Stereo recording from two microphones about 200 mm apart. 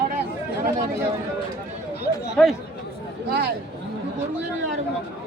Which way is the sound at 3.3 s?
55° right (ahead or behind).